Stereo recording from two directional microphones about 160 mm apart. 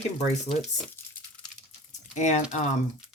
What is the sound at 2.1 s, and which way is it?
Speech, 45° left (ahead or behind).